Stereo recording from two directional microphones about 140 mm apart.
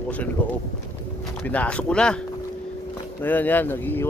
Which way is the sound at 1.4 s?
10° left (ahead or behind).